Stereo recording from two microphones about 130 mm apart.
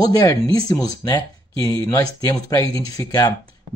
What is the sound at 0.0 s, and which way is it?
Speech, 25° left (ahead or behind).